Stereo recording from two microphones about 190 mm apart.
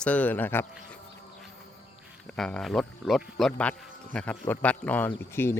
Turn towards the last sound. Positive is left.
turn(degrees=10)  # may be behind; listen again after turning